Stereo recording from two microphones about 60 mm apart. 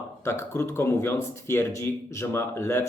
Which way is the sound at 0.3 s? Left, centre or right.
Left.